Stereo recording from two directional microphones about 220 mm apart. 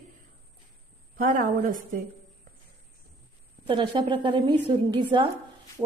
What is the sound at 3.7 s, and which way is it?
A woman's voice, 20° right (ahead or behind).